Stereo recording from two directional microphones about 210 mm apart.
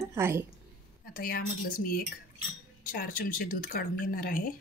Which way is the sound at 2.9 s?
40° left (ahead or behind).